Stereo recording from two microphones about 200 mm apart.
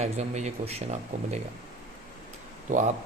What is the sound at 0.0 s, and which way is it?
A man's voice, 35° right (ahead or behind).